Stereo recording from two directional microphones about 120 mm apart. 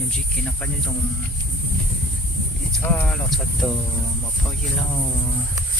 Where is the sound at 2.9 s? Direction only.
10° left (ahead or behind).